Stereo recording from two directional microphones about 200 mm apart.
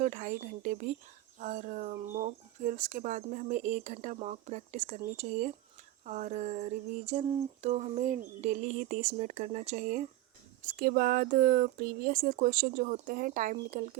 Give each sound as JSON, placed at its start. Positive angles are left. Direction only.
{"t": 0.0, "sound": "speech", "side_deg": -40}